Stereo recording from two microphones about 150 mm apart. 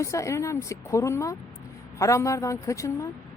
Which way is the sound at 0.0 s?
20° left (ahead or behind).